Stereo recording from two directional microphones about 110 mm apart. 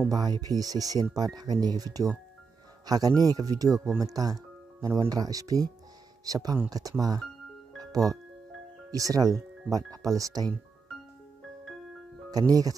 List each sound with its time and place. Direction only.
0.1 s speech: 35° right (ahead or behind)
7.7 s music: 35° right (ahead or behind)
8.9 s speech: 30° right (ahead or behind)
12.3 s speech: 35° right (ahead or behind)